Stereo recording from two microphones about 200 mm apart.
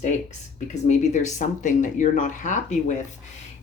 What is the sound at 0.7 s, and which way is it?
Speech, 35° left (ahead or behind).